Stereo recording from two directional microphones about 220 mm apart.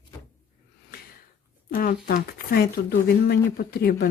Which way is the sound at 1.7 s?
40° left (ahead or behind).